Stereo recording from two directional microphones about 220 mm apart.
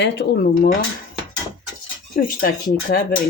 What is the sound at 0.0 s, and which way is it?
Speech, 45° left (ahead or behind).